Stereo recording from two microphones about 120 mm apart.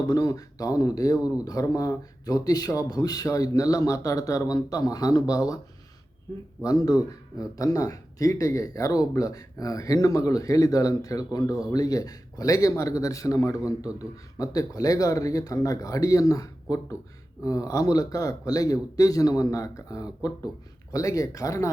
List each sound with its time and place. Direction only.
0.1 s speech: 30° left (ahead or behind)
6.6 s speech: 30° left (ahead or behind)